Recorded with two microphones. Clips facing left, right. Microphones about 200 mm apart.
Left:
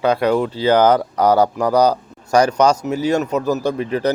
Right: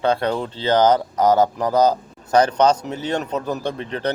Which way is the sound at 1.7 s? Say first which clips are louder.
Left 1 dB; 25° right (ahead or behind).